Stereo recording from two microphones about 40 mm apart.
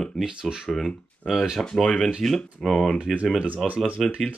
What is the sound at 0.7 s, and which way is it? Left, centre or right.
Speech, centre.